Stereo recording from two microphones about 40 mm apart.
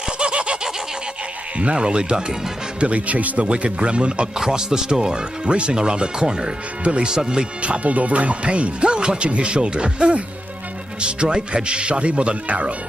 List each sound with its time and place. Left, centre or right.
0.2 s snicker: right
1.6 s speech: right
2.8 s speech: right
3.4 s speech: right
4.4 s speech: centre
7.6 s speech: right